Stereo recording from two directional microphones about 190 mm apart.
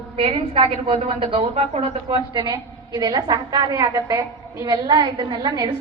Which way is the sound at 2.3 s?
20° right (ahead or behind).